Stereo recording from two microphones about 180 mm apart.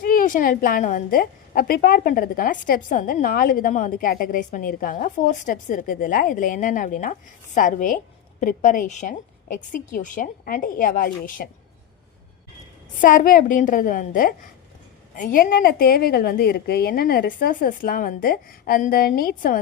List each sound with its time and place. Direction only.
0.0 s a woman's voice: 50° left (ahead or behind)
13.0 s a woman's voice: 50° left (ahead or behind)